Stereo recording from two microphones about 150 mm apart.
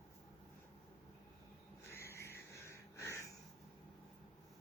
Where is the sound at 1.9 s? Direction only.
15° left (ahead or behind).